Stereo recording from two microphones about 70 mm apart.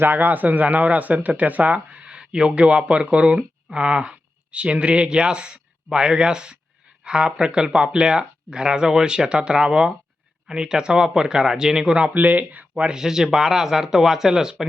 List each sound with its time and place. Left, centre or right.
0.0 s speech: right
13.0 s speech: centre